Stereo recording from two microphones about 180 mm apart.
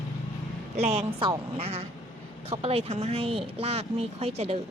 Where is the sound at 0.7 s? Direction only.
35° right (ahead or behind).